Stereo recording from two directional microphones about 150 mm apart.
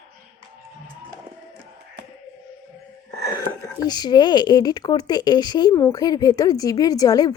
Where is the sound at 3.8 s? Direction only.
30° left (ahead or behind).